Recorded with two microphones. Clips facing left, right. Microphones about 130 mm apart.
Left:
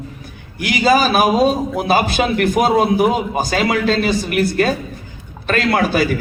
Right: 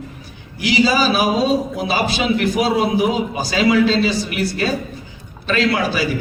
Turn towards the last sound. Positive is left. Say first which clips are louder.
# left 2 dB
turn(degrees=50)  # may be behind; listen again after turning